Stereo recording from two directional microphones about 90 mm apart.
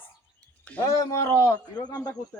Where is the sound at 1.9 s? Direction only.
45° left (ahead or behind).